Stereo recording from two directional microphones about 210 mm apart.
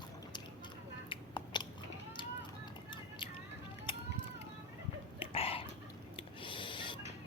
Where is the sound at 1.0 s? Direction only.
20° left (ahead or behind).